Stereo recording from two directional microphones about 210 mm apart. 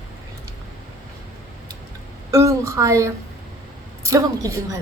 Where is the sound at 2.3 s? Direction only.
15° right (ahead or behind).